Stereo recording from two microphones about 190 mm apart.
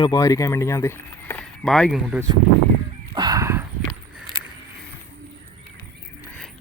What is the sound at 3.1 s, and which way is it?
Horse, 20° right (ahead or behind).